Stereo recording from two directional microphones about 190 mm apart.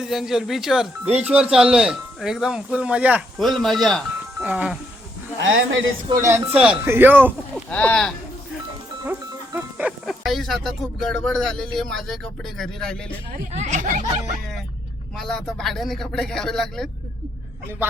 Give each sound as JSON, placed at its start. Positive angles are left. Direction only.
{"t": 0.0, "sound": "speech", "side_deg": 0}
{"t": 5.4, "sound": "speech", "side_deg": -90}
{"t": 6.1, "sound": "speech", "side_deg": -15}
{"t": 7.5, "sound": "speech", "side_deg": 10}
{"t": 9.0, "sound": "music", "side_deg": -10}
{"t": 11.2, "sound": "speech", "side_deg": 0}
{"t": 13.5, "sound": "speech", "side_deg": -40}
{"t": 15.2, "sound": "speech", "side_deg": 0}